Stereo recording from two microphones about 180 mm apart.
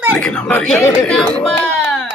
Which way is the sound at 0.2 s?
10° left (ahead or behind).